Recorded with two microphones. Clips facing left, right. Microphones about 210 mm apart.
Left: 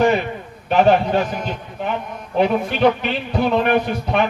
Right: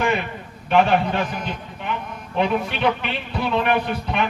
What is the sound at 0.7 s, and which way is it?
Speech, 40° left (ahead or behind).